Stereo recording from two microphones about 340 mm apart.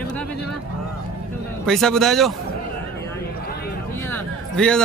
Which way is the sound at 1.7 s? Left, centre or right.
Centre.